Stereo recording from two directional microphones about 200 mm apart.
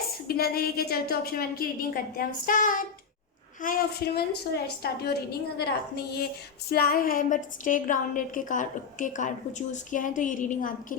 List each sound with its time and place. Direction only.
0.3 s a woman's voice: 50° left (ahead or behind)